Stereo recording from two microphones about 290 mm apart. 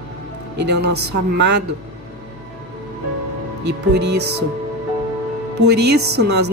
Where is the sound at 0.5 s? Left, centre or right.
Right.